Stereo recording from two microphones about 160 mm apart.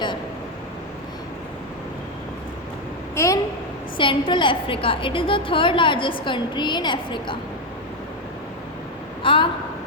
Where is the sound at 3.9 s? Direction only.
30° left (ahead or behind).